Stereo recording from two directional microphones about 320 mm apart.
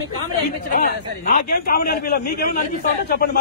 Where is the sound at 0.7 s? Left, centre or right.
Left.